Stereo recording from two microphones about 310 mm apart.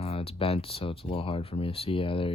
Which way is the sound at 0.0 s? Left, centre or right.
Centre.